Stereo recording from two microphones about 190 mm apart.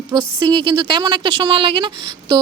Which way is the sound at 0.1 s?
20° right (ahead or behind).